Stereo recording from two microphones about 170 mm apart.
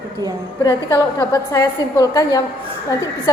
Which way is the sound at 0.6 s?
25° left (ahead or behind).